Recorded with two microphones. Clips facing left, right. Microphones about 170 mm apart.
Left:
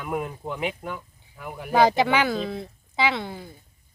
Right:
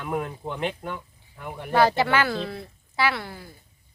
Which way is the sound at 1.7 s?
15° left (ahead or behind).